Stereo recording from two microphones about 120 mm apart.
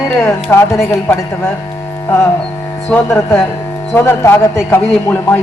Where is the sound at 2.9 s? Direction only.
20° left (ahead or behind).